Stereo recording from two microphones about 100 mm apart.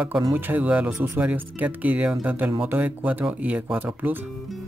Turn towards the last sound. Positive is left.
turn(degrees=-20)  # may be behind; listen again after turning